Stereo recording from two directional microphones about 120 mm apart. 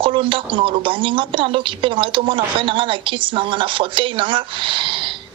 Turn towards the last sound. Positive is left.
turn(degrees=-45)  # may be behind; listen again after turning